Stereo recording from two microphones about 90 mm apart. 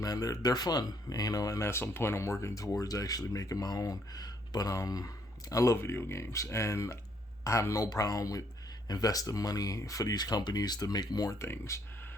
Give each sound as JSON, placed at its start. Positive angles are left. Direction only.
{"t": 0.0, "sound": "speech", "side_deg": 40}
{"t": 11.3, "sound": "speech", "side_deg": 30}